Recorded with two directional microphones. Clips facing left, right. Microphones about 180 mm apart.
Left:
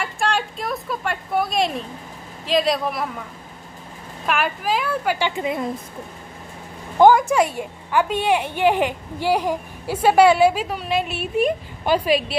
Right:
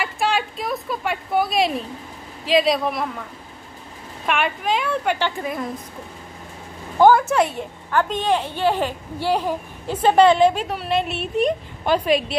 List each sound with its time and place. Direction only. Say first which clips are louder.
0.0 s speech: right 1 dB; 5° right (ahead or behind)
4.3 s speech: even; centre (ahead or behind)
5.4 s a woman's voice: left 3 dB; 25° left (ahead or behind)
7.0 s a woman's voice: left 1 dB; 15° left (ahead or behind)